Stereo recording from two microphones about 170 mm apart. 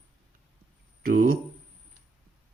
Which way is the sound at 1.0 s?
55° right (ahead or behind).